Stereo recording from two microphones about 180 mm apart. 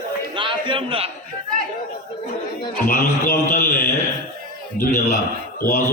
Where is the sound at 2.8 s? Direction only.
50° left (ahead or behind).